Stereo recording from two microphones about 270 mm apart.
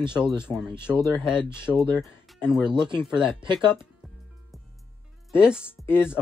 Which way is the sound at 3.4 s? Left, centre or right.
Centre.